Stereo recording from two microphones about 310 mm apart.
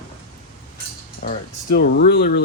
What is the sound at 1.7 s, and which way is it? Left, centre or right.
Speech, left.